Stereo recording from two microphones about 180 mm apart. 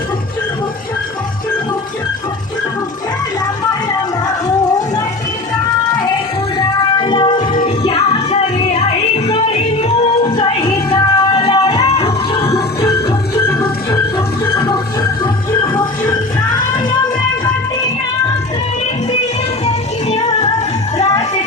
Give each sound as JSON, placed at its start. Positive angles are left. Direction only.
{"t": 6.6, "sound": "music", "side_deg": 25}
{"t": 12.4, "sound": "music", "side_deg": 20}
{"t": 19.6, "sound": "music", "side_deg": 35}